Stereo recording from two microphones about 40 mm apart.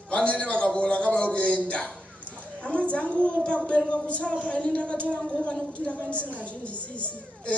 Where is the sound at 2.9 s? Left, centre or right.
Left.